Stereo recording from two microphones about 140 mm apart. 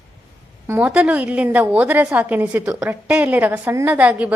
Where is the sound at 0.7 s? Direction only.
10° right (ahead or behind).